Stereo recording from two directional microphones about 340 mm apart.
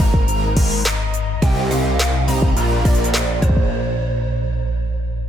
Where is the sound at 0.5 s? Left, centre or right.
Centre.